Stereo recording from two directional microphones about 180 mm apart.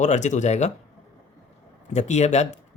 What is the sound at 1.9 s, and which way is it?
Speech, 40° left (ahead or behind).